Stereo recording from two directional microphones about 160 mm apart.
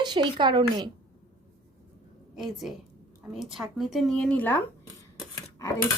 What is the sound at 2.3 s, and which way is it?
Speech, centre (ahead or behind).